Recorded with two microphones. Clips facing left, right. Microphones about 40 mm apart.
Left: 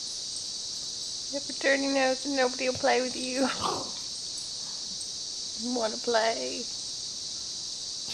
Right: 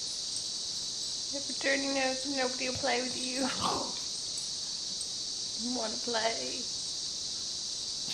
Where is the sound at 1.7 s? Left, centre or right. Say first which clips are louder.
Left 5 dB; centre.